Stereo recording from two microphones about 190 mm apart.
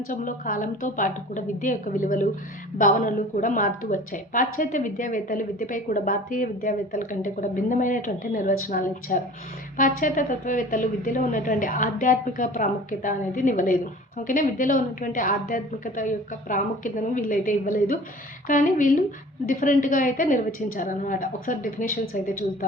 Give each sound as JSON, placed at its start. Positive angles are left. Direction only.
{"t": 0.1, "sound": "a woman's voice", "side_deg": 45}